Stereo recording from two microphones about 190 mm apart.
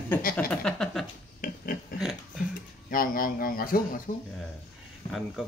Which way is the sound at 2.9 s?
50° left (ahead or behind).